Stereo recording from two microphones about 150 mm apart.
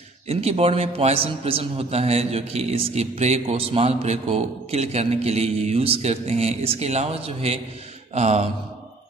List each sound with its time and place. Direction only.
0.3 s a man's voice: 45° right (ahead or behind)